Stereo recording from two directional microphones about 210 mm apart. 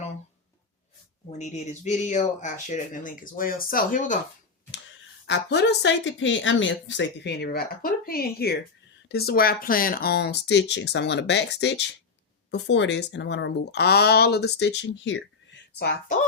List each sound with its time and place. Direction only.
1.4 s speech: 35° left (ahead or behind)
5.2 s speech: 55° left (ahead or behind)